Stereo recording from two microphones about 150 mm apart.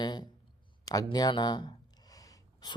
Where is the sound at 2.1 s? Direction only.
25° left (ahead or behind).